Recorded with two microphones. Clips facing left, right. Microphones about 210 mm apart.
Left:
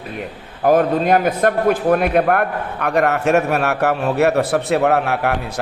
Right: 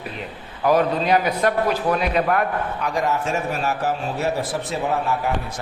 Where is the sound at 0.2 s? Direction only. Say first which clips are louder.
Left 5 dB; 50° left (ahead or behind).